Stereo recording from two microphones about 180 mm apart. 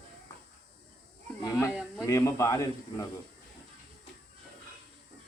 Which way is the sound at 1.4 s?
15° left (ahead or behind).